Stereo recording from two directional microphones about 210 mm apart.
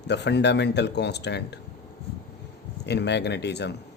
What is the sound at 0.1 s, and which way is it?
Speech, 55° left (ahead or behind).